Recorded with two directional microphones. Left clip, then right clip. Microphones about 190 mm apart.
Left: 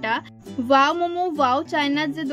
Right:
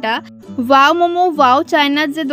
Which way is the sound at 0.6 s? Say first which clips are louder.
Right 8 dB; 40° right (ahead or behind).